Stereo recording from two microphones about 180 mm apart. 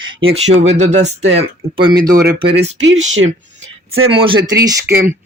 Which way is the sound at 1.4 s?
30° right (ahead or behind).